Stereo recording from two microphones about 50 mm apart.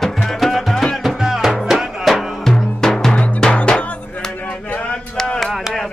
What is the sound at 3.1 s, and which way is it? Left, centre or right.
Drum, left.